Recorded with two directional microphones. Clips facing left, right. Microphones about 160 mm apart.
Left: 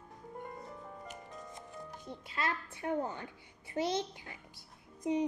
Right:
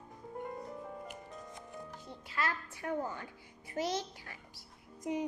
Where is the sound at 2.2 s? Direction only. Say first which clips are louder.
Even; 25° left (ahead or behind).